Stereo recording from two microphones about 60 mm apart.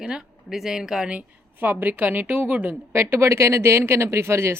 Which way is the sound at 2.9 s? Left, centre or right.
Right.